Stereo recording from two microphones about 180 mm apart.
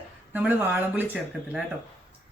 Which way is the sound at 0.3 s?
10° right (ahead or behind).